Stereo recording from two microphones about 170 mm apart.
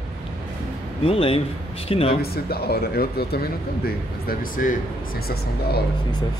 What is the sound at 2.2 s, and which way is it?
Speech, 65° left (ahead or behind).